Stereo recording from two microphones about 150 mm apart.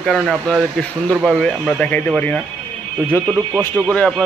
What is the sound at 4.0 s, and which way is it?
Speech, centre (ahead or behind).